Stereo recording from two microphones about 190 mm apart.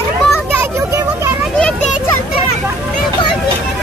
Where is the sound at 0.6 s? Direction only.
15° right (ahead or behind).